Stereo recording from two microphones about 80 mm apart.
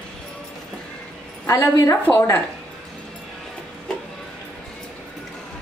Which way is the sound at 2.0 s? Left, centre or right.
Left.